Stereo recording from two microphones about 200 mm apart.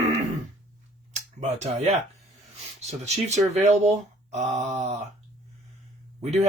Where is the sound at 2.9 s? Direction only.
35° right (ahead or behind).